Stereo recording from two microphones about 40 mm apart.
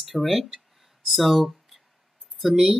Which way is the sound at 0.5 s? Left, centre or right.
Centre.